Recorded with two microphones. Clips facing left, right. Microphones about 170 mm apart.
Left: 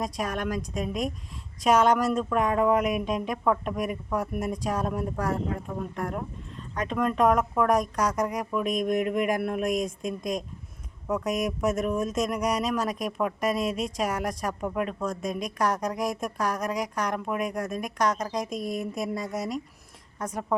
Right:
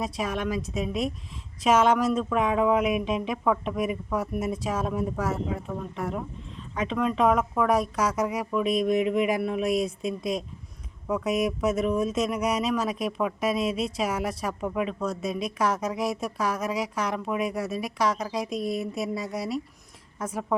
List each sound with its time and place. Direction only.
0.0 s speech: centre (ahead or behind)
9.6 s speech: 40° left (ahead or behind)
11.0 s speech: centre (ahead or behind)
13.6 s speech: 40° left (ahead or behind)
14.0 s speech: 5° right (ahead or behind)
15.2 s speech: 40° left (ahead or behind)
15.5 s a woman's voice: 5° right (ahead or behind)